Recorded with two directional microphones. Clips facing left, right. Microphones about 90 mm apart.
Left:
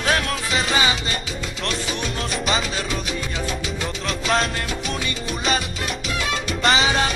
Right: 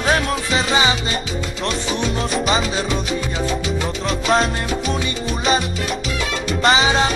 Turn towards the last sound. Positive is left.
turn(degrees=0)  # may be behind; listen again after turning